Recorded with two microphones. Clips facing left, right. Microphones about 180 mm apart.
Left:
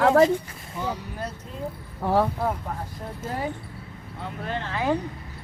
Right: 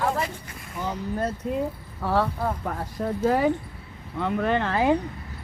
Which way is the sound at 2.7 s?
80° right.